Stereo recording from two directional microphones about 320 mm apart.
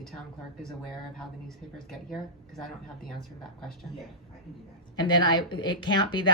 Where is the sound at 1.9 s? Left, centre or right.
Centre.